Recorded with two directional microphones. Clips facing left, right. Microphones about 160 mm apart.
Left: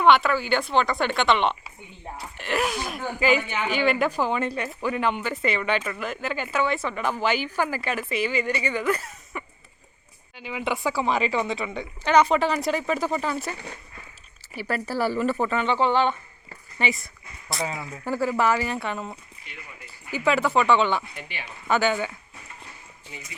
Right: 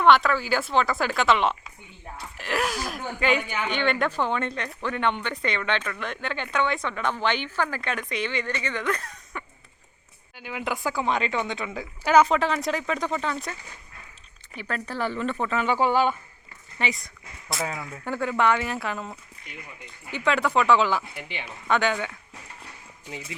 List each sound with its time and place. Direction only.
0.0 s speech: centre (ahead or behind)
16.7 s speech: centre (ahead or behind)
21.2 s speech: 20° right (ahead or behind)
21.7 s speech: 5° left (ahead or behind)